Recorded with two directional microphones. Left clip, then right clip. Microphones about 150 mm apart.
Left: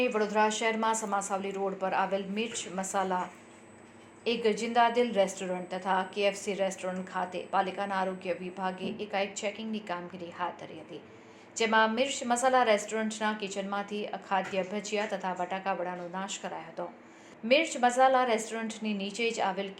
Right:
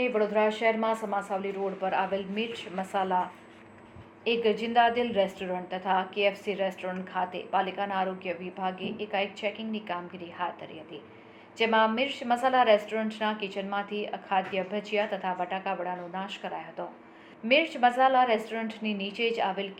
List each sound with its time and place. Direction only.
0.0 s a woman's voice: 40° left (ahead or behind)
11.5 s a woman's voice: 45° left (ahead or behind)